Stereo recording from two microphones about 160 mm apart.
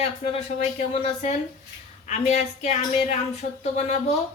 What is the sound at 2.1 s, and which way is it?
A woman's voice, 45° left (ahead or behind).